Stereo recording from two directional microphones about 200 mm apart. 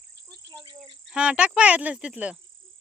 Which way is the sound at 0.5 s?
25° right (ahead or behind).